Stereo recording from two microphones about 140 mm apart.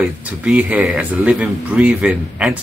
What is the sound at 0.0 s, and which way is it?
Speech, 10° right (ahead or behind).